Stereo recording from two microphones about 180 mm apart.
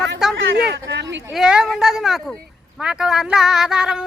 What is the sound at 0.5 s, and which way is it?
Speech, 70° right (ahead or behind).